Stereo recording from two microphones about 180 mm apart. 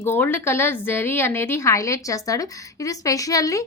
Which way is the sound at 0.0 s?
10° left (ahead or behind).